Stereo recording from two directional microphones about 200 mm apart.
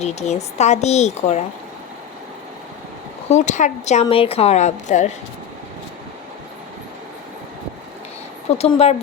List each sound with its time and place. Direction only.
0.0 s a woman's voice: 35° left (ahead or behind)
3.2 s a woman's voice: 35° left (ahead or behind)
8.5 s a woman's voice: 30° left (ahead or behind)